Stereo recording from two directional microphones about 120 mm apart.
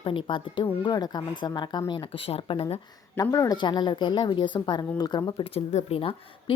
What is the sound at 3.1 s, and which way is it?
A woman's voice, 30° left (ahead or behind).